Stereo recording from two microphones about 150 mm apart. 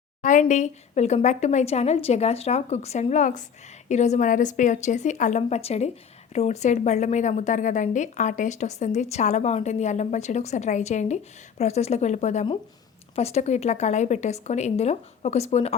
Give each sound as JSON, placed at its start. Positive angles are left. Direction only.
{"t": 0.2, "sound": "a woman's voice", "side_deg": 60}